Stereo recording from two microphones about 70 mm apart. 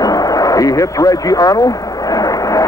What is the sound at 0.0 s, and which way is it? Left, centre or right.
Speech, left.